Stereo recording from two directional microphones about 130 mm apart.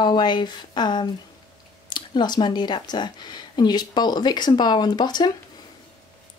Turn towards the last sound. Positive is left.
turn(degrees=35)  # may be behind; listen again after turning